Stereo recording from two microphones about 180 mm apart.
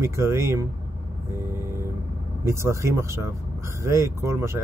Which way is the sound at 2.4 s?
15° right (ahead or behind).